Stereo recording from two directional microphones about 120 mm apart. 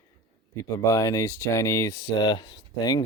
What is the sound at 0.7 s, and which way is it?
Speech, 25° left (ahead or behind).